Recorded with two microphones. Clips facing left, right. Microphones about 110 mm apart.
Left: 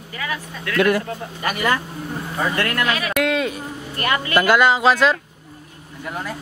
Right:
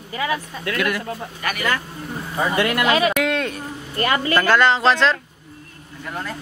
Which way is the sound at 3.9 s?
30° right (ahead or behind).